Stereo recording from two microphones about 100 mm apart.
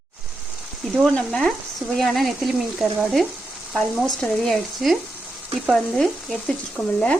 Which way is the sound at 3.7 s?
5° right (ahead or behind).